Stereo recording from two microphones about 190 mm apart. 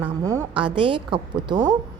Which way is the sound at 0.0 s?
15° right (ahead or behind).